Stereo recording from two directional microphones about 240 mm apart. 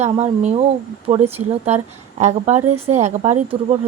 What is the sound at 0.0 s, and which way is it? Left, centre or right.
Speech, right.